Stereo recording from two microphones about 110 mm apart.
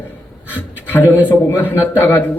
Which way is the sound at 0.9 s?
20° left (ahead or behind).